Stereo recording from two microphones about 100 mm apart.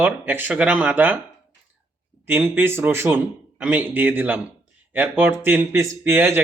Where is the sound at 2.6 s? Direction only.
20° right (ahead or behind).